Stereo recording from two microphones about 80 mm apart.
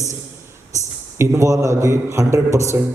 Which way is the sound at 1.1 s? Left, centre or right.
Right.